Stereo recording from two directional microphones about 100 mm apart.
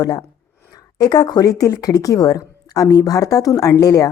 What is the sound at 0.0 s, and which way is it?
A woman's voice, 40° left (ahead or behind).